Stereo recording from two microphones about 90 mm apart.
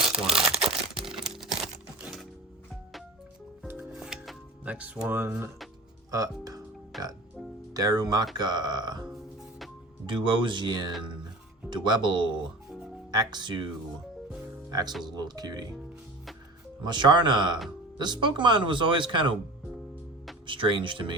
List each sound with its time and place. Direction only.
0.1 s crumpling: 5° right (ahead or behind)
3.7 s music: 15° right (ahead or behind)
6.1 s speech: 40° right (ahead or behind)
6.9 s speech: centre (ahead or behind)
7.7 s speech: 45° right (ahead or behind)
10.1 s speech: 60° right (ahead or behind)
14.7 s speech: 45° right (ahead or behind)
16.8 s speech: 55° right (ahead or behind)
20.5 s speech: 65° right (ahead or behind)